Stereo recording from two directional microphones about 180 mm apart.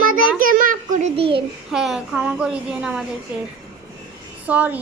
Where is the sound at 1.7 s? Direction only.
Centre (ahead or behind).